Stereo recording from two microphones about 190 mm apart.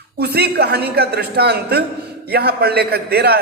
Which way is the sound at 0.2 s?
55° right (ahead or behind).